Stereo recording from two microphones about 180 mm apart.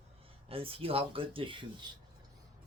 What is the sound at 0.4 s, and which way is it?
Speech, 30° right (ahead or behind).